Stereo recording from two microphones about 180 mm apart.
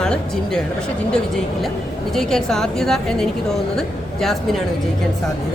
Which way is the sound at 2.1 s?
5° left (ahead or behind).